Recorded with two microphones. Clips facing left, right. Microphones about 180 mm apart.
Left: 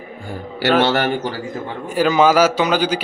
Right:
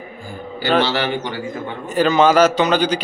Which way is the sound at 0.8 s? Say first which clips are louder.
Left 2 dB; 55° left (ahead or behind).